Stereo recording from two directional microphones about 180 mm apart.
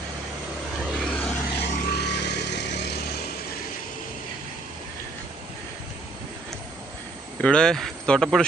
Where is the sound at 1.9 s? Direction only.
65° left (ahead or behind).